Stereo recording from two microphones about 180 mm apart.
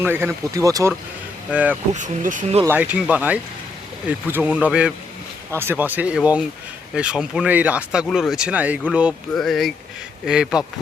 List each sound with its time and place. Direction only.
0.0 s speech: 10° right (ahead or behind)
1.9 s speech: 45° right (ahead or behind)
2.6 s speech: 10° right (ahead or behind)